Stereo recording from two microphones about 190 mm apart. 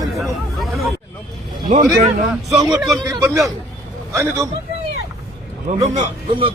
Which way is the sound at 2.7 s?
5° right (ahead or behind).